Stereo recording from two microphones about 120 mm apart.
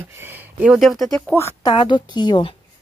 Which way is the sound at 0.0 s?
20° right (ahead or behind).